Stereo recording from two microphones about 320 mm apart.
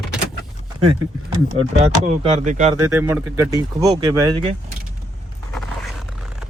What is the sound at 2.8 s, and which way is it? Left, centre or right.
Speech, centre.